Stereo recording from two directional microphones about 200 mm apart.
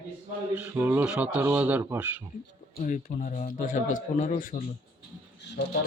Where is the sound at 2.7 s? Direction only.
40° left (ahead or behind).